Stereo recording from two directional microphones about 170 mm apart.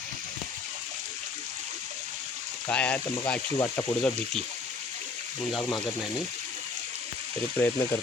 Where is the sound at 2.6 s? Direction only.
5° left (ahead or behind).